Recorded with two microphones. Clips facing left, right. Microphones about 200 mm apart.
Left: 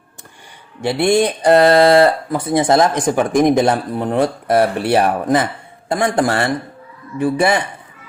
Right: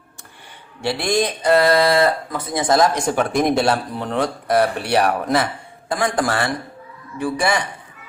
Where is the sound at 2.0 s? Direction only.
30° left (ahead or behind).